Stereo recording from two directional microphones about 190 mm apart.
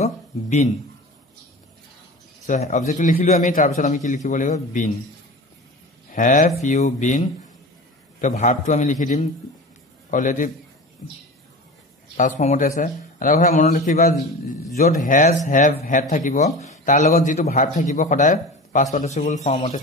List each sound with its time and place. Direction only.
0.0 s a sound: 40° left (ahead or behind)
2.4 s a man's voice: 40° left (ahead or behind)
6.1 s a man's voice: 45° left (ahead or behind)
12.2 s a man's voice: 40° left (ahead or behind)